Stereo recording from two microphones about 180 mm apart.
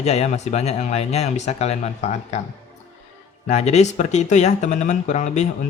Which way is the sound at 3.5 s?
40° left (ahead or behind).